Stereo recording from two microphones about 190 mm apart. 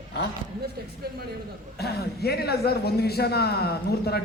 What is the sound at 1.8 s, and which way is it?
A man's voice, 55° left (ahead or behind).